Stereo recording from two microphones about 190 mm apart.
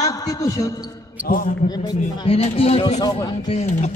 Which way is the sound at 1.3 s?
50° left (ahead or behind).